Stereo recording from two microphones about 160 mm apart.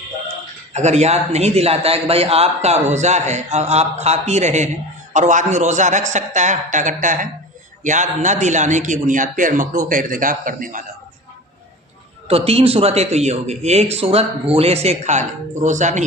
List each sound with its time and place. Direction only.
0.7 s a man's voice: 45° right (ahead or behind)
12.3 s a man's voice: 40° right (ahead or behind)